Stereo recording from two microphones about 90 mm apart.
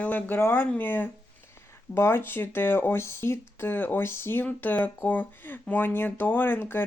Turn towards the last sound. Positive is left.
turn(degrees=25)  # may be behind; listen again after turning